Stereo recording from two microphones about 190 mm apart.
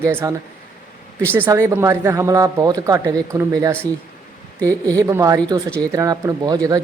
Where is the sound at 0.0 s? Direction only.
15° right (ahead or behind).